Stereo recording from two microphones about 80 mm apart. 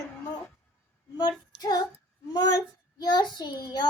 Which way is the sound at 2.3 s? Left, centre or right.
Left.